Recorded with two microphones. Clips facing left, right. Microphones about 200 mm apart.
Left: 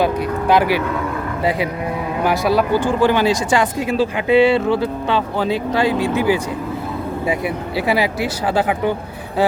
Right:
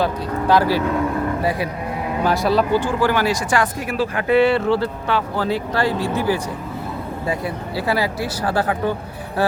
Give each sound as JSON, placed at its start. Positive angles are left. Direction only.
{"t": 0.0, "sound": "speech", "side_deg": 20}
{"t": 2.2, "sound": "speech", "side_deg": 10}